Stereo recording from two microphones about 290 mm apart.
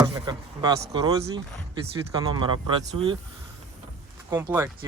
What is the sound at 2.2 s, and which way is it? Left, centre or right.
Speech, centre.